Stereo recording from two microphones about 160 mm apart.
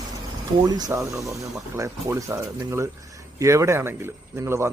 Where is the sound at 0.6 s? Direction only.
25° right (ahead or behind).